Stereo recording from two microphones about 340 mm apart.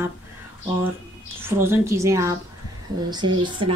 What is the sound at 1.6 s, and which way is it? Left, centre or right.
Speech, centre.